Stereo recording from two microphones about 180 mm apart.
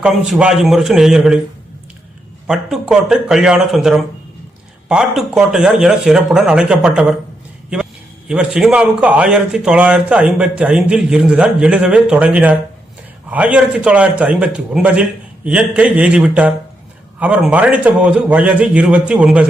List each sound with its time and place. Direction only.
0.0 s a man's voice: 5° right (ahead or behind)
2.5 s a man's voice: 5° right (ahead or behind)
8.3 s a man's voice: 5° right (ahead or behind)